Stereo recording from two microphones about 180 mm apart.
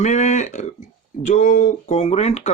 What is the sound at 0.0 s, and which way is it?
Speech, 40° left (ahead or behind).